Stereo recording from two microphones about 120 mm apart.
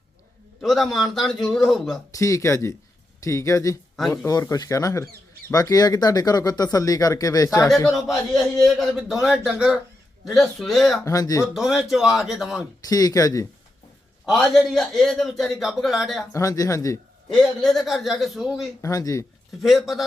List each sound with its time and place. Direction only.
0.6 s speech: centre (ahead or behind)
2.1 s speech: 25° left (ahead or behind)
7.9 s speech: centre (ahead or behind)
11.0 s speech: 30° left (ahead or behind)
11.5 s speech: centre (ahead or behind)
12.8 s speech: 30° left (ahead or behind)
14.3 s speech: centre (ahead or behind)
16.3 s speech: 30° left (ahead or behind)
17.2 s speech: centre (ahead or behind)
18.8 s speech: 30° left (ahead or behind)
19.6 s speech: centre (ahead or behind)